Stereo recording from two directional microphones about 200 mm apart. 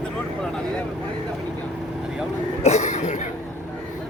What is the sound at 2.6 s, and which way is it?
Cough, 35° left (ahead or behind).